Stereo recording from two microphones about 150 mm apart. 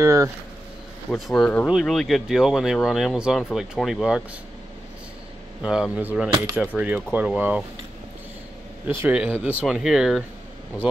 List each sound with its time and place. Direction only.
0.0 s speech: 20° right (ahead or behind)
1.2 s speech: centre (ahead or behind)
5.6 s speech: 5° right (ahead or behind)
8.8 s speech: 15° right (ahead or behind)